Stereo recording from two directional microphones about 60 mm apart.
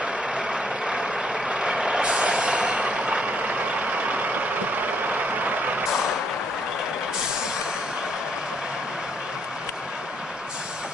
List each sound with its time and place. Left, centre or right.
0.0 s vehicle: centre